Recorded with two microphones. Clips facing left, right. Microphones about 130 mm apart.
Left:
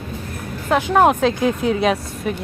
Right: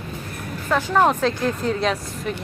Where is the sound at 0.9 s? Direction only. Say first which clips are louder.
Left 4 dB; 60° left (ahead or behind).